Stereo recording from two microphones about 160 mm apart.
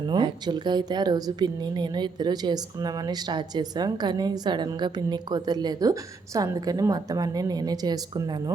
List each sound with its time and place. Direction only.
0.1 s a woman's voice: 25° right (ahead or behind)